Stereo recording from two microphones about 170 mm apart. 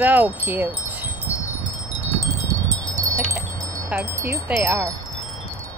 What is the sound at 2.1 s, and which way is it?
Chime, 20° right (ahead or behind).